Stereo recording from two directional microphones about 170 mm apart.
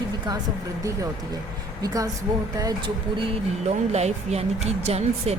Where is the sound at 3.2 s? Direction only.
40° right (ahead or behind).